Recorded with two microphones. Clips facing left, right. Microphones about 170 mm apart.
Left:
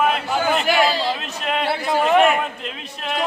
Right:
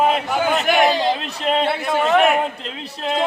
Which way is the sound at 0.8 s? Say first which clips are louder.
Right 3 dB; 20° right (ahead or behind).